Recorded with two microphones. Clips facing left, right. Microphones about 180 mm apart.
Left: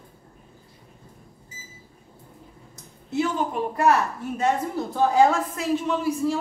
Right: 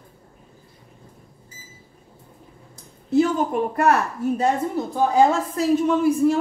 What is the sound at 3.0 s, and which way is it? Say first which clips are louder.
Speech: right 6 dB; 40° right (ahead or behind).